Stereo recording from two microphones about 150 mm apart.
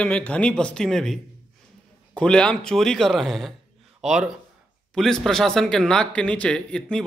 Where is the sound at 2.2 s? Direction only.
5° left (ahead or behind).